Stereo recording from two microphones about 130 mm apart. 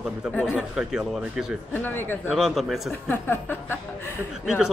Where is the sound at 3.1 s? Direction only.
15° left (ahead or behind).